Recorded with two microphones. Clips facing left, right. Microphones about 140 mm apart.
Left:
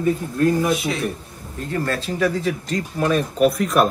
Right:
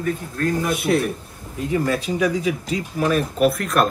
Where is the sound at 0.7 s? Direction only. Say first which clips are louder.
Right 5 dB; 55° right (ahead or behind).